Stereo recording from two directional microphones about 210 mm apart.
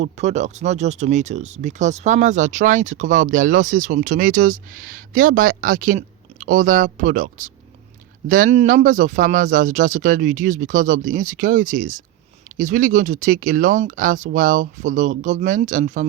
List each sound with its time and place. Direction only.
0.0 s speech: 35° right (ahead or behind)